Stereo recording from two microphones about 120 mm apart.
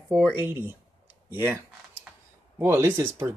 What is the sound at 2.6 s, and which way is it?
Speech, 20° right (ahead or behind).